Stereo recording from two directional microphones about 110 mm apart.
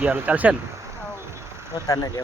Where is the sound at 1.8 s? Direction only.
30° left (ahead or behind).